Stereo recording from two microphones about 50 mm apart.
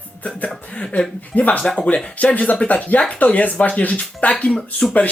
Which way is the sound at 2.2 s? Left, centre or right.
Left.